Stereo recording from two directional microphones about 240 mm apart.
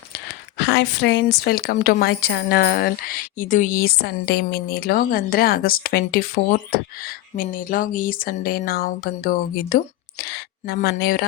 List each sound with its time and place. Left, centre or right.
0.1 s speech: left